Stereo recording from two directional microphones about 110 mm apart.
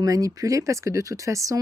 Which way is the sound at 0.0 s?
30° right (ahead or behind).